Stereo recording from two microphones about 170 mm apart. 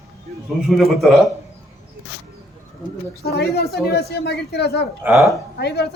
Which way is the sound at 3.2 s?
70° left (ahead or behind).